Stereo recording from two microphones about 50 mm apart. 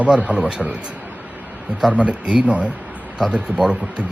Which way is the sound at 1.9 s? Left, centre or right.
Right.